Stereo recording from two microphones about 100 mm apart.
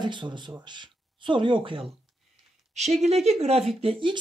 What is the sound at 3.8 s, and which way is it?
Speech, 60° right (ahead or behind).